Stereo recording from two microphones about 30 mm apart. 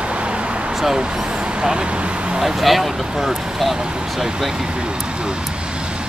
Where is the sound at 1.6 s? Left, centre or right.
Right.